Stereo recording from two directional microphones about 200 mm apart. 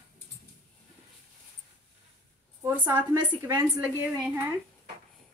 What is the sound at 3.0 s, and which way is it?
A woman's voice, 15° right (ahead or behind).